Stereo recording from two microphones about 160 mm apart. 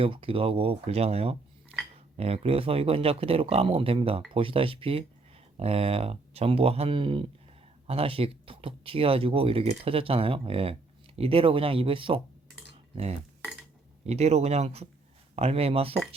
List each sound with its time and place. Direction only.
0.0 s speech: 35° right (ahead or behind)
14.1 s speech: 40° right (ahead or behind)